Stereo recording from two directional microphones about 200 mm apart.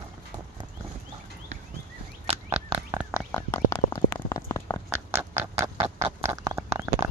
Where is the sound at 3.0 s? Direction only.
5° right (ahead or behind).